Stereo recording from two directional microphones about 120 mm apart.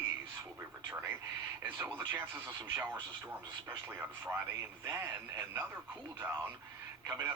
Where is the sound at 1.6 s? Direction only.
15° right (ahead or behind).